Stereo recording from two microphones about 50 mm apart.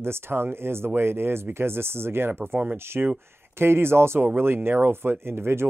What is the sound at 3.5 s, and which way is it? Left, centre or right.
Speech, right.